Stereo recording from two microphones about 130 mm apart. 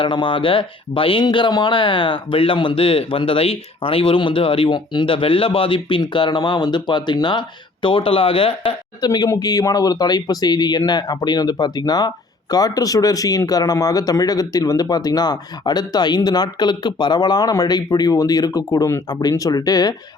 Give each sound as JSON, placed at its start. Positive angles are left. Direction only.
{"t": 0.0, "sound": "speech", "side_deg": 40}
{"t": 9.0, "sound": "speech", "side_deg": 30}